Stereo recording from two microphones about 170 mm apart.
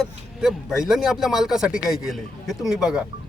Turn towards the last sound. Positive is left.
turn(degrees=-5)  # may be behind; listen again after turning